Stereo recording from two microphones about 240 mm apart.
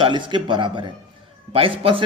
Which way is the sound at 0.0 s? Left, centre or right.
Centre.